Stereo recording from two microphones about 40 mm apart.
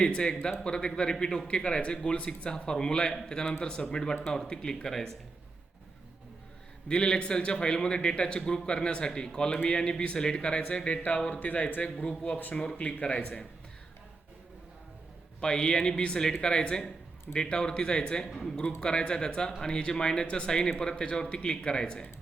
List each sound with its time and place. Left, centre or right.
0.0 s a man's voice: left
6.8 s a man's voice: left
11.3 s speech: left
12.0 s a man's voice: left
12.4 s speech: left
12.8 s a man's voice: left
15.4 s a man's voice: centre